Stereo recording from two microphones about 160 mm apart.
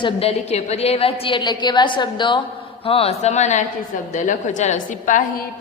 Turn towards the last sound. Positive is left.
turn(degrees=55)  # may be behind; listen again after turning